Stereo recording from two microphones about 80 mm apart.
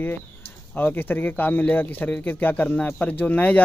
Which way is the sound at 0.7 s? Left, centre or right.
Left.